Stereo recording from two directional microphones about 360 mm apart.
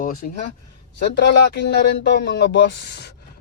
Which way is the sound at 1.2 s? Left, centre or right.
Left.